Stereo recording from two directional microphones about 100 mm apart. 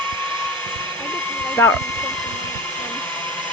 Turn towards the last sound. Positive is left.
turn(degrees=20)  # may be behind; listen again after turning